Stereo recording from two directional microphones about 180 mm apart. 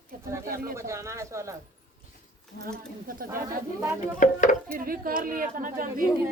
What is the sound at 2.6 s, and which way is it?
Speech, 50° right (ahead or behind).